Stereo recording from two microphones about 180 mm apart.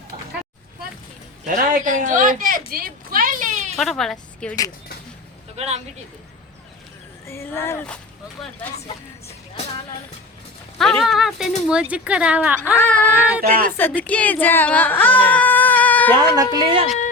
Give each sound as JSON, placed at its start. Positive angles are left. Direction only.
{"t": 1.5, "sound": "speech", "side_deg": -45}
{"t": 3.8, "sound": "a woman's voice", "side_deg": 0}
{"t": 5.5, "sound": "speech", "side_deg": -35}
{"t": 7.3, "sound": "speech", "side_deg": 15}
{"t": 10.8, "sound": "speech", "side_deg": 0}
{"t": 12.7, "sound": "speech", "side_deg": 10}
{"t": 13.5, "sound": "speech", "side_deg": -55}
{"t": 13.7, "sound": "speech", "side_deg": 10}
{"t": 16.3, "sound": "speech", "side_deg": -20}